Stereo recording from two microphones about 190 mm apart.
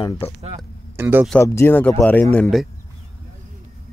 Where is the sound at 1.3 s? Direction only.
10° left (ahead or behind).